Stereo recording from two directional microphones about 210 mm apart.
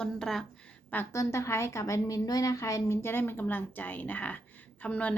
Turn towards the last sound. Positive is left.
turn(degrees=5)  # may be behind; listen again after turning